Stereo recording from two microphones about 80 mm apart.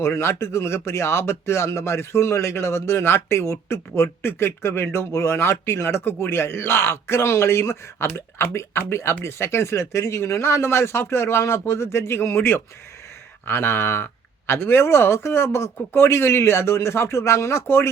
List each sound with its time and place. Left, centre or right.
0.0 s speech: left